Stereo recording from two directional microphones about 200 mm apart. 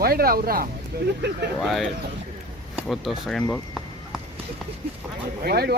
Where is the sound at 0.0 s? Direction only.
50° right (ahead or behind).